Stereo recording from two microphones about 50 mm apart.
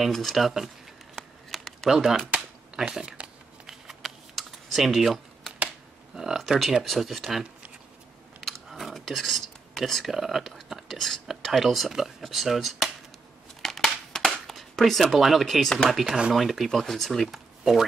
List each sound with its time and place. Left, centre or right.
0.0 s speech: centre
1.5 s typing: centre
2.0 s speech: centre
2.7 s speech: centre
3.6 s typing: centre
6.1 s speech: centre
8.4 s biting: centre
8.8 s a sound: centre
10.1 s speech: centre
13.6 s a sound: centre
16.1 s speech: centre
16.3 s speech: centre